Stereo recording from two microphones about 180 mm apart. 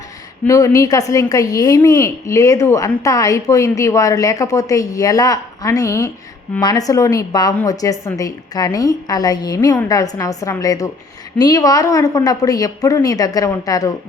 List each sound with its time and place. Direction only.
0.4 s a woman's voice: 20° left (ahead or behind)